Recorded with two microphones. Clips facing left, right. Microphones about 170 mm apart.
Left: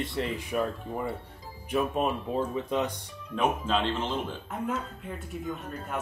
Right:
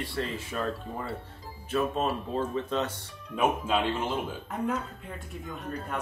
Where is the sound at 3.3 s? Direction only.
10° right (ahead or behind).